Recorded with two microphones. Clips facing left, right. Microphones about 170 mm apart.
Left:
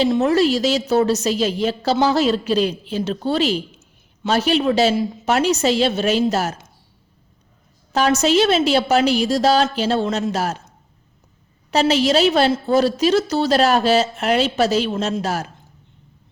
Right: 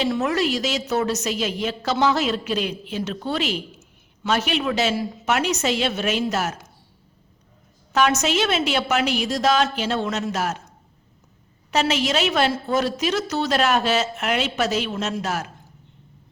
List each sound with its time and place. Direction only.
0.1 s a woman's voice: 30° left (ahead or behind)
7.9 s a woman's voice: 35° left (ahead or behind)
11.7 s a woman's voice: 35° left (ahead or behind)